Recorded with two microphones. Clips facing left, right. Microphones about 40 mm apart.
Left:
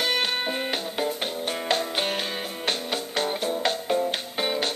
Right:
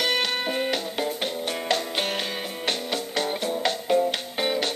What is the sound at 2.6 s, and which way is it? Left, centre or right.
Music, left.